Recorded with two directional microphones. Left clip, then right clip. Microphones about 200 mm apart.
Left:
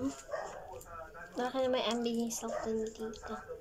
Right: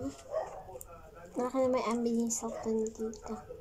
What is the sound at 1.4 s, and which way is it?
Speech, 30° right (ahead or behind).